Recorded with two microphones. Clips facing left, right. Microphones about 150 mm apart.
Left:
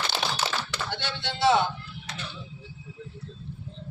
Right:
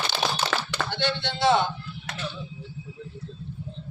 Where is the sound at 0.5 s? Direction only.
75° right (ahead or behind).